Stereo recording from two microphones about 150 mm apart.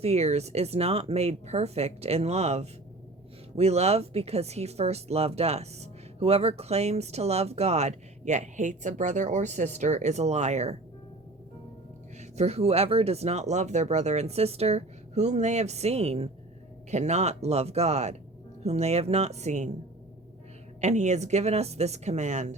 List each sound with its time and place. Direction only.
0.0 s speech: 45° right (ahead or behind)
12.4 s speech: 45° right (ahead or behind)
20.8 s speech: 50° right (ahead or behind)